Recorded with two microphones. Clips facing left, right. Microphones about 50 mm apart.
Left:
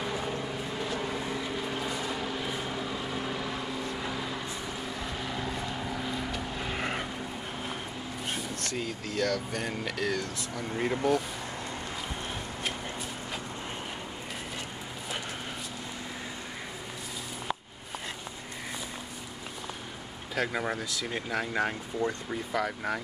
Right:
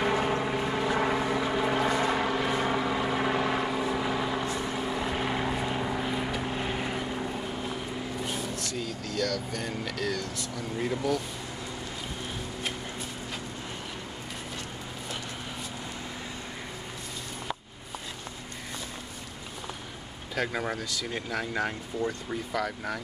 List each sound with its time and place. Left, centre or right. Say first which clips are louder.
0.0 s vehicle: right 6 dB; right
4.1 s vehicle: right 6 dB; right
5.5 s vehicle: right 4 dB; right
6.8 s vehicle: even; left
8.7 s speech: left 2 dB; left
20.3 s speech: even; centre